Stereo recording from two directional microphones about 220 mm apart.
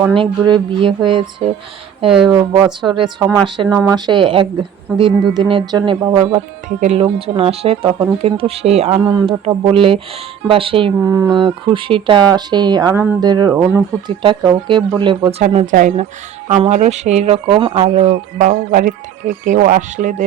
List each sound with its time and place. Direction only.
0.1 s speech: 20° right (ahead or behind)
2.0 s speech: centre (ahead or behind)
2.6 s speech: 20° right (ahead or behind)
6.1 s speech: 30° right (ahead or behind)
12.9 s speech: 10° right (ahead or behind)
14.1 s speech: 20° right (ahead or behind)